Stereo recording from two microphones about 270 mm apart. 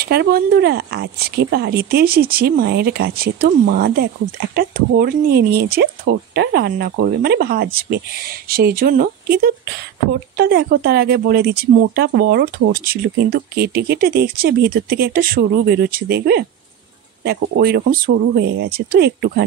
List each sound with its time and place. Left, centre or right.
0.0 s speech: right